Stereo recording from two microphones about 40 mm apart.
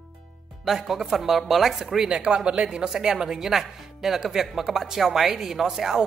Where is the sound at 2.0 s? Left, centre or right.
Right.